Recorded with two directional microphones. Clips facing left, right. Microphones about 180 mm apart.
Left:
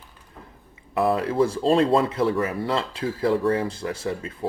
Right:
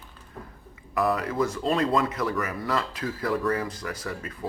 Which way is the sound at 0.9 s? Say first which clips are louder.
Left 4 dB; 30° left (ahead or behind).